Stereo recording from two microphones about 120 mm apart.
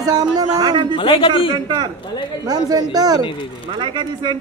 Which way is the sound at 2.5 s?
35° right (ahead or behind).